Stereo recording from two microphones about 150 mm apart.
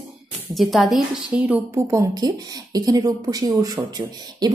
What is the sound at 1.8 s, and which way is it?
Speech, 20° right (ahead or behind).